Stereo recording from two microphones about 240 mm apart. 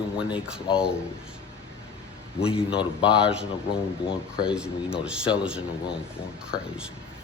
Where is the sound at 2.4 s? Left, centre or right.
Left.